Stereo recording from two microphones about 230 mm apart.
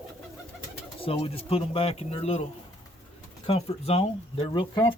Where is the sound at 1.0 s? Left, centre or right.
Left.